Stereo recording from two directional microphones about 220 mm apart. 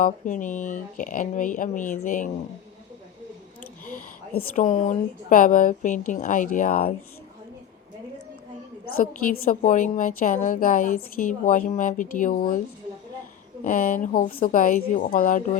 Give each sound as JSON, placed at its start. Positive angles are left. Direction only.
{"t": 0.0, "sound": "a woman's voice", "side_deg": 35}
{"t": 3.8, "sound": "a woman's voice", "side_deg": 40}
{"t": 9.0, "sound": "a woman's voice", "side_deg": 40}
{"t": 13.7, "sound": "a woman's voice", "side_deg": 40}